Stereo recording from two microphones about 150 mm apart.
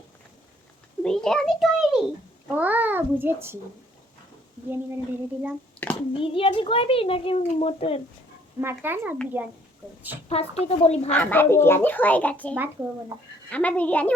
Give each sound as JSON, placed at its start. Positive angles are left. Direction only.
{"t": 1.0, "sound": "a sound", "side_deg": 5}
{"t": 2.6, "sound": "a child's voice", "side_deg": -10}
{"t": 4.7, "sound": "a child's voice", "side_deg": -15}
{"t": 5.8, "sound": "a sound", "side_deg": 10}
{"t": 6.1, "sound": "speech", "side_deg": 35}
{"t": 8.6, "sound": "a child's voice", "side_deg": -15}
{"t": 10.2, "sound": "speech", "side_deg": 45}
{"t": 11.1, "sound": "a child's voice", "side_deg": 10}